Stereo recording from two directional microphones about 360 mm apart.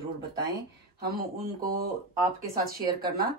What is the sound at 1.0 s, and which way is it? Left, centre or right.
Speech, right.